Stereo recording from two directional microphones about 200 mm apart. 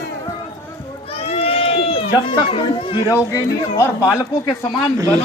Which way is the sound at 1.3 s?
30° left (ahead or behind).